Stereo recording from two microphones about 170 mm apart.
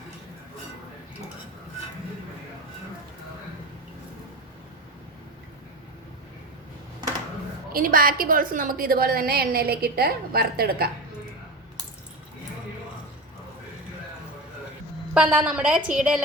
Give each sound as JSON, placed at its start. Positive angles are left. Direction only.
{"t": 7.7, "sound": "a woman's voice", "side_deg": -55}
{"t": 15.1, "sound": "a woman's voice", "side_deg": -5}